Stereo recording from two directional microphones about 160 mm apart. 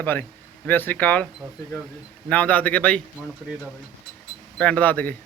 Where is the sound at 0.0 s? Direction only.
10° left (ahead or behind).